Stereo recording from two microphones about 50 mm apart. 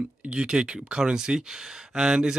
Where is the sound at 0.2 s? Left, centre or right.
Centre.